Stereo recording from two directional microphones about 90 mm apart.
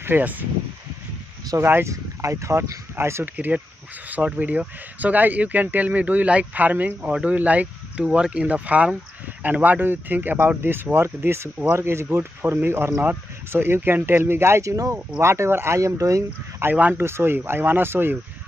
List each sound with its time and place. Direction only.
0.0 s speech: 20° right (ahead or behind)
1.6 s speech: 25° right (ahead or behind)
3.3 s speech: 15° right (ahead or behind); by 16.7 s 30° right (ahead or behind)
16.7 s speech: 15° right (ahead or behind)